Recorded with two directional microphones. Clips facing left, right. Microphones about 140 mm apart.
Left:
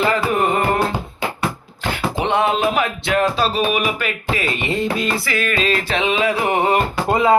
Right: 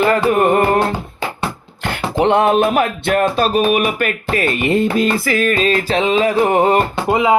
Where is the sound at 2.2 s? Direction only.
55° right (ahead or behind).